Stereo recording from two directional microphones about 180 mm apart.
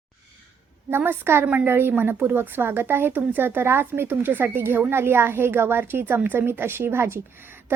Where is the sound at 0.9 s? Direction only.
10° right (ahead or behind).